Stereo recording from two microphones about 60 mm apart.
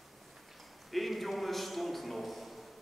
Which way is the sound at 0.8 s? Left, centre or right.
Centre.